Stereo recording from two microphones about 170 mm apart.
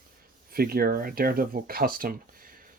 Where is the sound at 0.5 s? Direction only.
65° right (ahead or behind).